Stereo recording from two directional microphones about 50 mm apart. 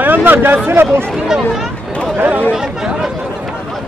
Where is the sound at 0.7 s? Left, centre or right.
Right.